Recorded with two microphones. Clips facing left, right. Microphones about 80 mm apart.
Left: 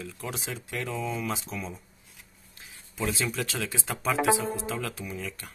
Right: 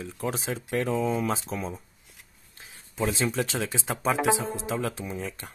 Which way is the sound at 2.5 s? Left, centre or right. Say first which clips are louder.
Right 4 dB; right.